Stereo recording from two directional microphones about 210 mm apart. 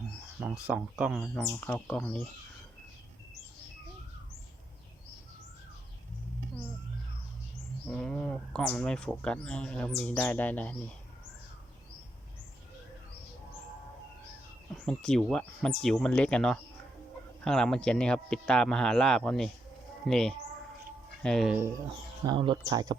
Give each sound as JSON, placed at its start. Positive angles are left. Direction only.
{"t": 0.3, "sound": "speech", "side_deg": -5}
{"t": 7.9, "sound": "speech", "side_deg": 5}
{"t": 14.7, "sound": "speech", "side_deg": 0}
{"t": 22.3, "sound": "speech", "side_deg": -20}